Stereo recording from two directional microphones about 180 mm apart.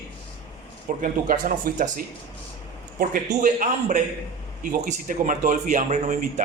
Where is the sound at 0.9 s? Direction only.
50° right (ahead or behind).